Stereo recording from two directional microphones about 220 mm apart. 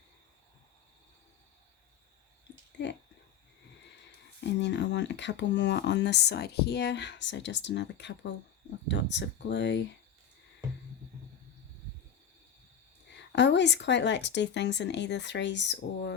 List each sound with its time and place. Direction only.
4.4 s speech: 50° left (ahead or behind)
13.3 s speech: 50° left (ahead or behind)